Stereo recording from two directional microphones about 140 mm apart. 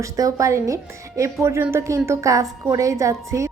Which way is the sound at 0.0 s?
25° right (ahead or behind).